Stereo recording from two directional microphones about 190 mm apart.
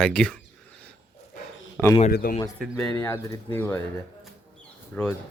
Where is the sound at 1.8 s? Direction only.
10° left (ahead or behind).